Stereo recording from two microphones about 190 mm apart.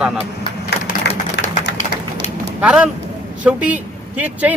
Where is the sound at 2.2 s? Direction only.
35° left (ahead or behind).